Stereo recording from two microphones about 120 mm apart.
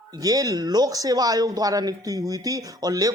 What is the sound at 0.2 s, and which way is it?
Speech, 30° right (ahead or behind).